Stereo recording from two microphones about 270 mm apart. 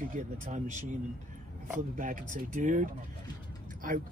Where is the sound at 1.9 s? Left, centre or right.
Right.